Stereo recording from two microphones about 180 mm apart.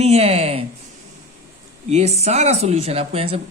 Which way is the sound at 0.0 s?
35° right (ahead or behind).